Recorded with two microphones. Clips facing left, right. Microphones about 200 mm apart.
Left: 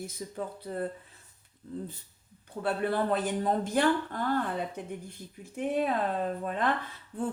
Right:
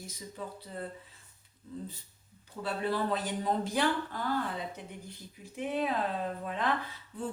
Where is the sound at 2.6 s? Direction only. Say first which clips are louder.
Left 3 dB; 55° left (ahead or behind).